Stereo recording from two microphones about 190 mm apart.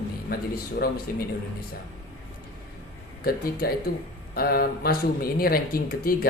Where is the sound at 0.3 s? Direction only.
55° left (ahead or behind).